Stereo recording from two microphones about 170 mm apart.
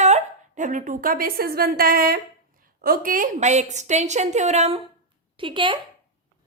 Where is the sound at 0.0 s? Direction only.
45° right (ahead or behind).